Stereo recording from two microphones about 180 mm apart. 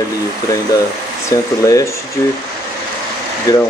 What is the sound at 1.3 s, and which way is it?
Speech, 20° left (ahead or behind).